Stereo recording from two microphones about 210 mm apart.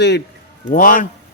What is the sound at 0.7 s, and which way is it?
Speech, 40° left (ahead or behind).